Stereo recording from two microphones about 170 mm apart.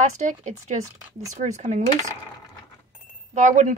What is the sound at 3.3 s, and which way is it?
Speech, 45° right (ahead or behind).